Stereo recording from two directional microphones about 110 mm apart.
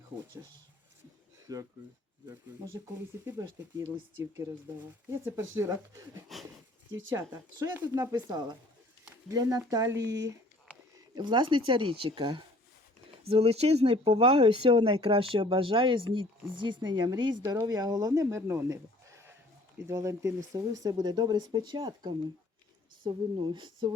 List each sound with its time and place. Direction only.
1.5 s speech: 35° right (ahead or behind)
5.1 s speech: 20° right (ahead or behind)
6.3 s speech: centre (ahead or behind)
7.1 s speech: 25° right (ahead or behind)
10.9 s speech: 40° right (ahead or behind)
13.3 s speech: 65° right (ahead or behind); by 23.9 s 45° right (ahead or behind)